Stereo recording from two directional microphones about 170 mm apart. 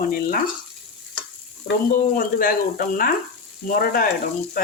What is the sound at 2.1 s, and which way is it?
Speech, 55° left (ahead or behind).